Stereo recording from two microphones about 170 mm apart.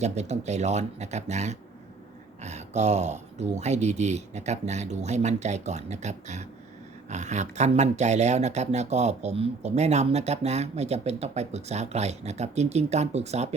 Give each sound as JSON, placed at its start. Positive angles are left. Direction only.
{"t": 0.0, "sound": "speech", "side_deg": -40}